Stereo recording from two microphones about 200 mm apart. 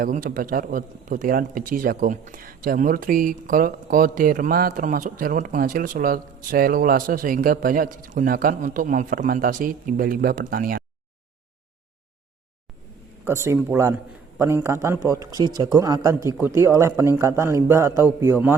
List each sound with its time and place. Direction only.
0.0 s a man's voice: 45° right (ahead or behind)
13.2 s a man's voice: 15° right (ahead or behind)